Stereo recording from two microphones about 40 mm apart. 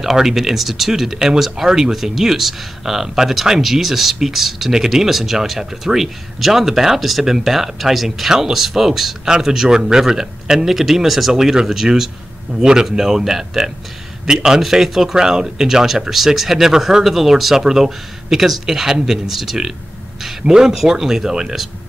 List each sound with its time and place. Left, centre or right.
0.0 s speech: centre